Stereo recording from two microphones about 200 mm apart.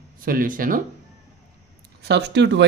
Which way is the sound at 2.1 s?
60° right (ahead or behind).